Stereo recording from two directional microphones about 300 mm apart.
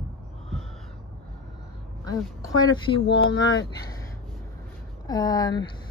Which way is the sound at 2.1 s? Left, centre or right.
Centre.